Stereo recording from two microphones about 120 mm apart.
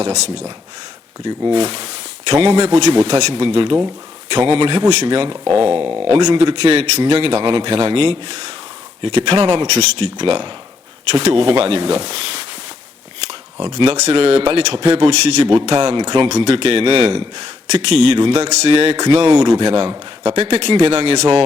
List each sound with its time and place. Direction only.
0.0 s speech: 70° right (ahead or behind)
1.2 s speech: 40° right (ahead or behind)
2.9 s a man's voice: 40° right (ahead or behind)
6.6 s a man's voice: 60° right (ahead or behind)
9.6 s speech: 65° right (ahead or behind)
10.2 s a man's voice: 45° right (ahead or behind)
11.2 s a man's voice: 60° right (ahead or behind)
13.6 s a man's voice: 45° right (ahead or behind)
13.9 s a man's voice: 60° right (ahead or behind); by 16.3 s 40° right (ahead or behind)
16.3 s a man's voice: 55° right (ahead or behind)
17.7 s speech: 65° right (ahead or behind)
18.2 s a man's voice: 50° right (ahead or behind)
18.4 s speech: 60° right (ahead or behind)
18.9 s a man's voice: 40° right (ahead or behind); by 21.2 s 60° right (ahead or behind)